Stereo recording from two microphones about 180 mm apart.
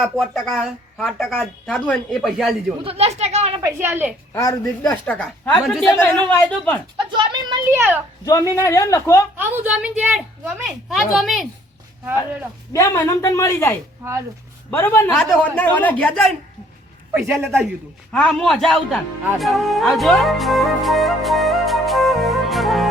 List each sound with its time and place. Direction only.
0.0 s speech: centre (ahead or behind)
2.8 s speech: 35° right (ahead or behind)
3.6 s a woman's voice: 15° right (ahead or behind)
4.4 s speech: 15° left (ahead or behind)
6.9 s a sound: 25° right (ahead or behind)
8.2 s speech: 20° left (ahead or behind)
9.4 s speech: 10° right (ahead or behind)
12.7 s speech: 20° left (ahead or behind)
14.0 s a woman's voice: 15° right (ahead or behind)
14.7 s speech: 10° left (ahead or behind)
17.2 s a woman's voice: 10° right (ahead or behind)
18.1 s speech: 5° left (ahead or behind)